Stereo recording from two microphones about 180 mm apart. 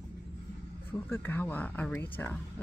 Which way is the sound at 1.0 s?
10° left (ahead or behind).